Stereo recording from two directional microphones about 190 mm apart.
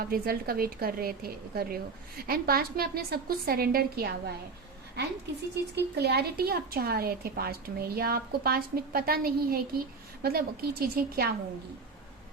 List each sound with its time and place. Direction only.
0.0 s speech: 50° right (ahead or behind)
5.7 s speech: 60° right (ahead or behind)